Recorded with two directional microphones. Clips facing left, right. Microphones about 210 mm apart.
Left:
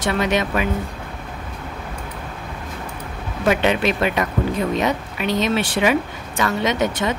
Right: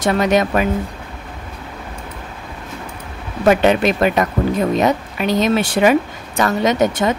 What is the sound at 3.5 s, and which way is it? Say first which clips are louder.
Speech: right 5 dB; 45° right (ahead or behind).